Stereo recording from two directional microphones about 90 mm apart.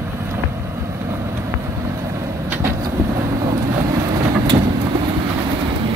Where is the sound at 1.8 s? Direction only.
35° right (ahead or behind).